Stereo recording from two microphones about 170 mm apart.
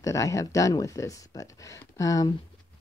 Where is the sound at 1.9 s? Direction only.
20° left (ahead or behind).